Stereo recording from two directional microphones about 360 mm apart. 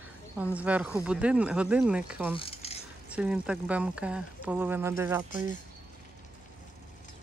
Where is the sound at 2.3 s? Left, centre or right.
Centre.